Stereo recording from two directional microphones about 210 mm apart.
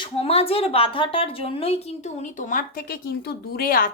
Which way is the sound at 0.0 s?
30° left (ahead or behind).